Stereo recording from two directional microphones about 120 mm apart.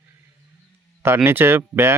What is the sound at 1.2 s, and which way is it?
Speech, 20° right (ahead or behind).